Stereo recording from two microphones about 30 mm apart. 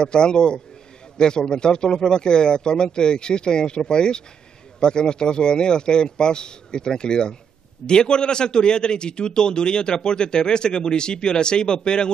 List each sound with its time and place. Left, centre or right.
0.0 s a man's voice: left